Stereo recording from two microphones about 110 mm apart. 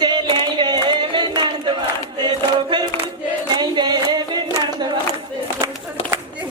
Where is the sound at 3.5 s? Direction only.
40° right (ahead or behind).